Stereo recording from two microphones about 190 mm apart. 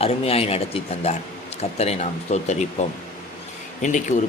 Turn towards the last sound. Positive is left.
turn(degrees=40)  # may be behind; listen again after turning